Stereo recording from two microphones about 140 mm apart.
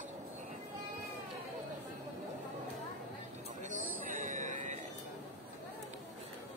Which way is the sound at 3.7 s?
65° right (ahead or behind).